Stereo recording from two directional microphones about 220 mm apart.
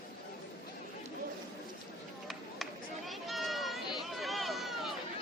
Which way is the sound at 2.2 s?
Centre (ahead or behind).